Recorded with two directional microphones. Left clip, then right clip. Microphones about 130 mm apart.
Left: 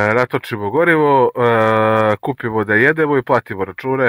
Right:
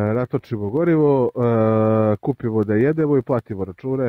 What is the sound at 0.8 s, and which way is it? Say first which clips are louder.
Mantra: left 5 dB; 90° right.